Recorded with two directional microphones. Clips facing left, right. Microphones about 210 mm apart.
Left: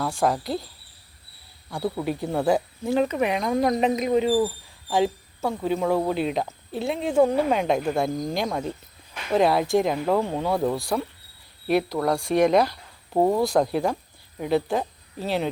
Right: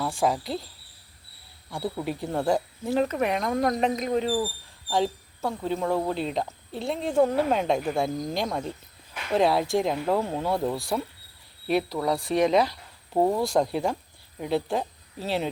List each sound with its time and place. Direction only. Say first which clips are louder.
0.0 s speech: left 2 dB; centre (ahead or behind)
1.7 s speech: left 3 dB; centre (ahead or behind)